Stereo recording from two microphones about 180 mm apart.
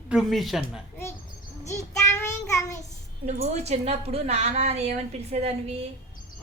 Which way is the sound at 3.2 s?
40° right (ahead or behind).